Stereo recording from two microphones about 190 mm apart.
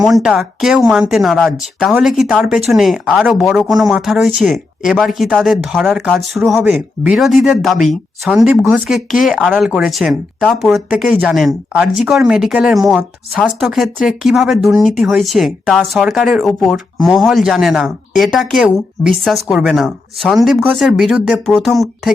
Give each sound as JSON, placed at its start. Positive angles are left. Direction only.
{"t": 0.0, "sound": "speech", "side_deg": 0}
{"t": 6.6, "sound": "speech", "side_deg": -10}